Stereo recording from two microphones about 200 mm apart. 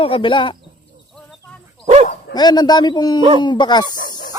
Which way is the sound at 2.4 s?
20° left (ahead or behind).